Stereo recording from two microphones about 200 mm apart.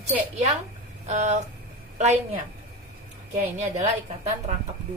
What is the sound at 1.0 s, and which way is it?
A woman's voice, 35° right (ahead or behind).